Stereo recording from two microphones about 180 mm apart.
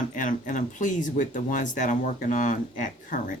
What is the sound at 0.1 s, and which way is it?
Speech, 45° left (ahead or behind).